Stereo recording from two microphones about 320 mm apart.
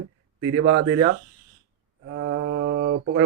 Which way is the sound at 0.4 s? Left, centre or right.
Right.